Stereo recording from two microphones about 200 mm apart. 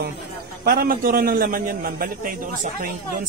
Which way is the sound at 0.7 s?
45° right (ahead or behind).